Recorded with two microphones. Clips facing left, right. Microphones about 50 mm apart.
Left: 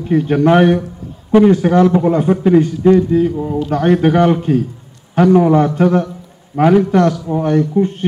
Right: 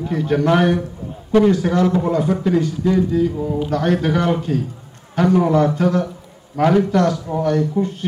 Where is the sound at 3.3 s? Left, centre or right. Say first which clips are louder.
Left 3 dB; left.